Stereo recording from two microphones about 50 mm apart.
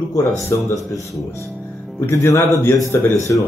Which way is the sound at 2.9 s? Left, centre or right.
Left.